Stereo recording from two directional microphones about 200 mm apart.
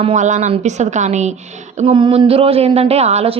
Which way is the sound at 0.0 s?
35° right (ahead or behind).